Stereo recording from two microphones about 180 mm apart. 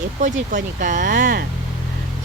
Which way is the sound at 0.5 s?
45° right (ahead or behind).